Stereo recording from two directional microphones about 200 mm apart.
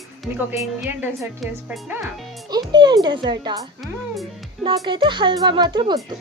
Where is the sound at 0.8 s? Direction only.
5° right (ahead or behind).